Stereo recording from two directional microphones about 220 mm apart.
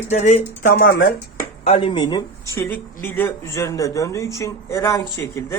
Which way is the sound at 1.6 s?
25° left (ahead or behind).